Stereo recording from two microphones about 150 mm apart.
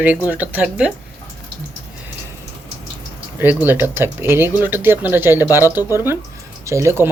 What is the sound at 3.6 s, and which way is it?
Speech, 15° right (ahead or behind).